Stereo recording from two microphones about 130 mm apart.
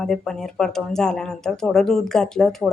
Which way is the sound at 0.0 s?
5° left (ahead or behind).